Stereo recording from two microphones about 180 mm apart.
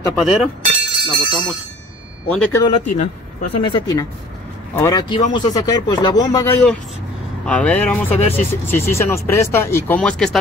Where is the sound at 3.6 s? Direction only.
20° left (ahead or behind).